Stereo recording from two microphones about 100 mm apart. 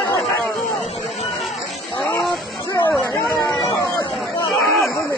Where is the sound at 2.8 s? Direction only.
20° left (ahead or behind).